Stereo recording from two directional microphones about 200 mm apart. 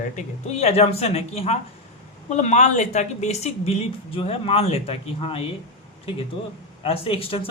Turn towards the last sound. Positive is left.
turn(degrees=25)  # may be behind; listen again after turning